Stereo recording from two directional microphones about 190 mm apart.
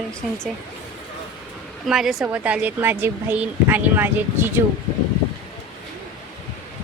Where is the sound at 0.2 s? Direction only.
Centre (ahead or behind).